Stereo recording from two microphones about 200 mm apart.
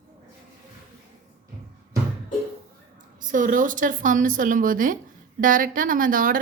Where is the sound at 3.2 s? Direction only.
40° right (ahead or behind).